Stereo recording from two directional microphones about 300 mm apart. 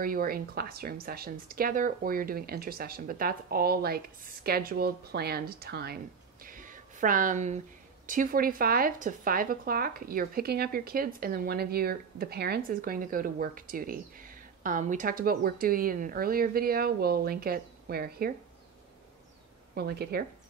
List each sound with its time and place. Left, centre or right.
0.0 s speech: right
6.4 s a sound: right
8.1 s speech: right
19.7 s speech: right